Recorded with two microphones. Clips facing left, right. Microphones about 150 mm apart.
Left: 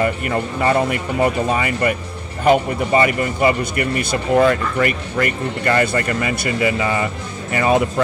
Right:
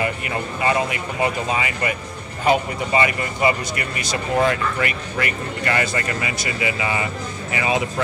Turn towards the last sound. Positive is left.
turn(degrees=50)  # may be behind; listen again after turning